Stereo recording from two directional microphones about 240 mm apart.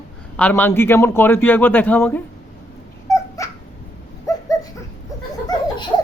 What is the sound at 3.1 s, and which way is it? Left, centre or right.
Dog, centre.